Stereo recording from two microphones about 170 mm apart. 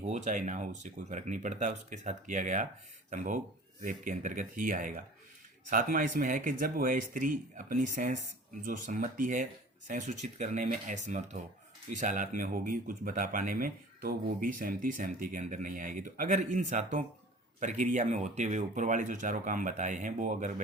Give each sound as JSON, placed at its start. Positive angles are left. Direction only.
{"t": 0.0, "sound": "speech", "side_deg": -45}